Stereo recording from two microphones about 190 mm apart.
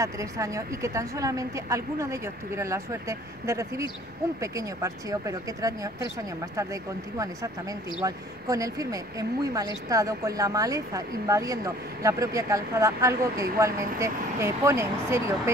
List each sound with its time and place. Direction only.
0.0 s speech: 15° right (ahead or behind)